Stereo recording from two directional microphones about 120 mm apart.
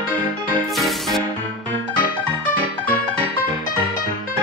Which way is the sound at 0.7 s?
Centre (ahead or behind).